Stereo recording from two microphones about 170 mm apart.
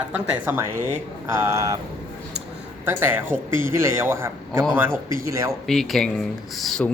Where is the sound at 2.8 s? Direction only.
15° right (ahead or behind).